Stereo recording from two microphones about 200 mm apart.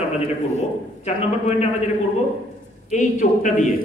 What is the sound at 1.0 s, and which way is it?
Speech, 30° left (ahead or behind).